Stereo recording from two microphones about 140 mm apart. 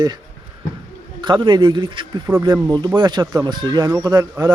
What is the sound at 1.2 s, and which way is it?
Speech, 35° right (ahead or behind).